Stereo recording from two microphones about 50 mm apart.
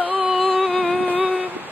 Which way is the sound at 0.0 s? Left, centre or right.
Right.